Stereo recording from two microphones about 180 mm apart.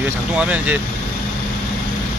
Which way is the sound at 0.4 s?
5° right (ahead or behind).